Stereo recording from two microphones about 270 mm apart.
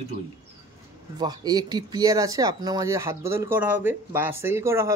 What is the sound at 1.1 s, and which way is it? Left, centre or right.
Speech, centre.